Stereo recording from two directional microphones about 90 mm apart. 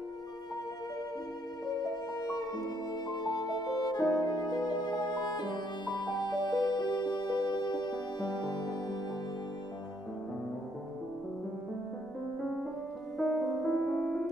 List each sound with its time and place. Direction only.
1.7 s music: 50° left (ahead or behind)
13.2 s music: centre (ahead or behind)